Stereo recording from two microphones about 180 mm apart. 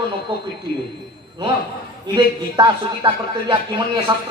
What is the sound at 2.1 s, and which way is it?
Speech, 25° right (ahead or behind).